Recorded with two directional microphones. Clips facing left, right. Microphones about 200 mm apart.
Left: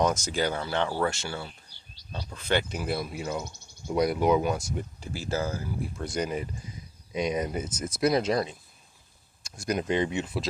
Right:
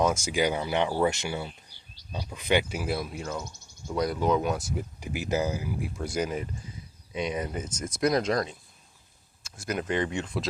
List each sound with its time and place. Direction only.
0.0 s speech: 10° right (ahead or behind)
3.3 s speech: 15° left (ahead or behind)
4.4 s speech: 5° right (ahead or behind)
4.9 s speech: 15° right (ahead or behind)
7.3 s speech: 15° left (ahead or behind)
9.4 s speech: 15° left (ahead or behind)